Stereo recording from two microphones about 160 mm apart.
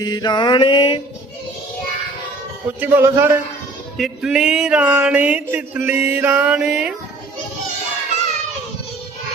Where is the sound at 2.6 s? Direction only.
10° right (ahead or behind).